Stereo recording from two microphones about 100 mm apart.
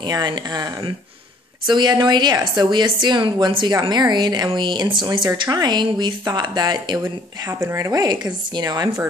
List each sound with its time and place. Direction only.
0.0 s a woman's voice: 45° right (ahead or behind)
7.4 s speech: 30° right (ahead or behind); by 8.9 s 45° right (ahead or behind)